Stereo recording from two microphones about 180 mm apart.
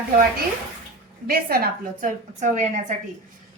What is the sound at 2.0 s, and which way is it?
Speech, 40° right (ahead or behind).